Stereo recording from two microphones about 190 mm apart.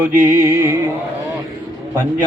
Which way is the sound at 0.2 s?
15° right (ahead or behind).